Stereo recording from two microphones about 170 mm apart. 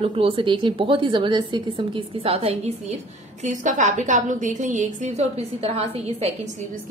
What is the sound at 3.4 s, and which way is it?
A woman's voice, 45° right (ahead or behind).